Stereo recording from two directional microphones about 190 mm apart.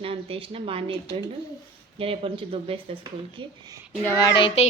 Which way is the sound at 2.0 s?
30° right (ahead or behind).